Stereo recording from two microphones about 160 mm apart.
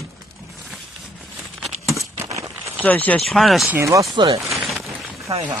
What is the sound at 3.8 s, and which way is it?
Speech, 20° right (ahead or behind).